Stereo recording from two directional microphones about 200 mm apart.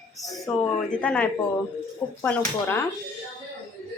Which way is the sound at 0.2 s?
5° left (ahead or behind).